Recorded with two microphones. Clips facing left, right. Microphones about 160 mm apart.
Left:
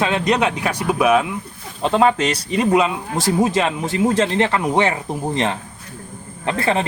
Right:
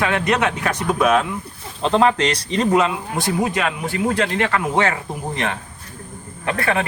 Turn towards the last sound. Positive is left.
turn(degrees=25)  # may be behind; listen again after turning